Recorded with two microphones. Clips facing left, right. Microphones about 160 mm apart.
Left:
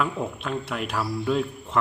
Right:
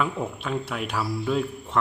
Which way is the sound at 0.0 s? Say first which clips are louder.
Even; centre (ahead or behind).